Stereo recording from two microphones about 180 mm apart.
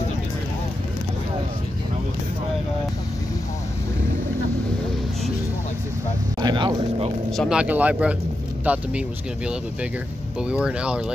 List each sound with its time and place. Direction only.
6.4 s speech: 25° right (ahead or behind)
7.2 s speech: centre (ahead or behind)
10.4 s speech: 5° right (ahead or behind)